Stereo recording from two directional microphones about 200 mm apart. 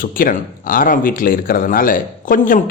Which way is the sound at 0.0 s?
45° left (ahead or behind).